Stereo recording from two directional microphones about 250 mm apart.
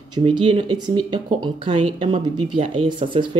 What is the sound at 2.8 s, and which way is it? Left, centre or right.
Speech, centre.